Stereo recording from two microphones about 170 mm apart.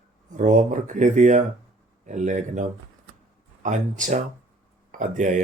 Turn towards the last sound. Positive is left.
turn(degrees=-45)  # may be behind; listen again after turning